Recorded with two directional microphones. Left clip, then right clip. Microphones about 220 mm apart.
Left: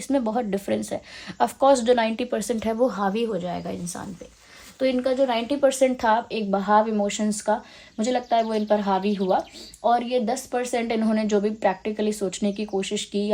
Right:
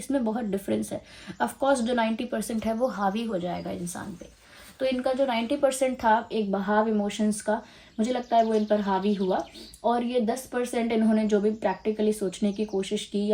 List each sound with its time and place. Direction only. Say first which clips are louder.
0.1 s a woman's voice: left 4 dB; 30° left (ahead or behind)
9.0 s speech: left 4 dB; 5° left (ahead or behind)
9.8 s a woman's voice: left 4 dB; 35° left (ahead or behind)